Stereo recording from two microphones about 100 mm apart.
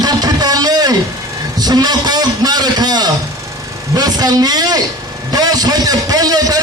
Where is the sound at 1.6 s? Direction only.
40° right (ahead or behind).